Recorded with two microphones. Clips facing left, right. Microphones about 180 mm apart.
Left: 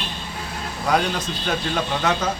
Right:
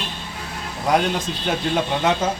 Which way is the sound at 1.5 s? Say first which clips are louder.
Right 3 dB; 20° right (ahead or behind).